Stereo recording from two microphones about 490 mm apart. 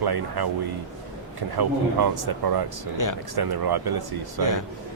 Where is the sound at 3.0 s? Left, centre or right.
Left.